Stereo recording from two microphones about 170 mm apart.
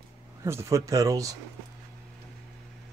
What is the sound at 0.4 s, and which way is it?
Speech, 15° right (ahead or behind).